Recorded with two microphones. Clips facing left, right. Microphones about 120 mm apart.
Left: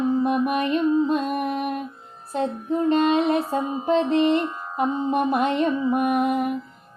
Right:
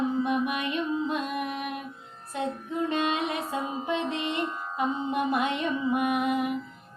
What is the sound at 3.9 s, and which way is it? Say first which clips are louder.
Speech: left 12 dB; 40° left (ahead or behind).